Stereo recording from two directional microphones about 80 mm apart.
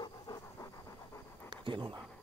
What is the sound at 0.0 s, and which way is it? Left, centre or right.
Pant, left.